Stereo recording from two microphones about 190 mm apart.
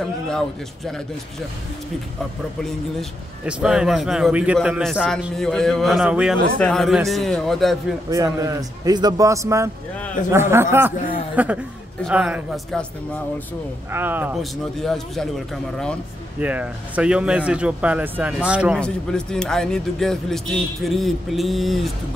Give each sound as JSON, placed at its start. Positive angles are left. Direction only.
{"t": 2.6, "sound": "speech", "side_deg": 0}
{"t": 8.1, "sound": "speech", "side_deg": -15}
{"t": 13.9, "sound": "speech", "side_deg": -10}
{"t": 16.3, "sound": "speech", "side_deg": -10}